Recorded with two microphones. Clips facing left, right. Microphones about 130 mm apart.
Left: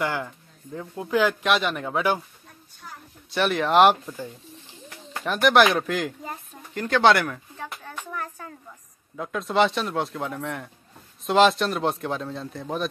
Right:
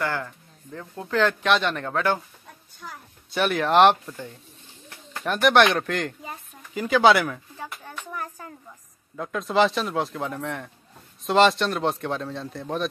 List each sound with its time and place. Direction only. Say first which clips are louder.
0.0 s speech: left 1 dB; 15° left (ahead or behind)
3.3 s speech: even; centre (ahead or behind)
7.5 s speech: left 1 dB; 10° right (ahead or behind)
9.1 s speech: right 1 dB; centre (ahead or behind)